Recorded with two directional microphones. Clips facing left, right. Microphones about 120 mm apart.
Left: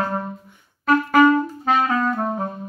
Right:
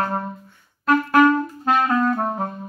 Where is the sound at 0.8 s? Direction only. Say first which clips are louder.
Left 1 dB; 5° left (ahead or behind).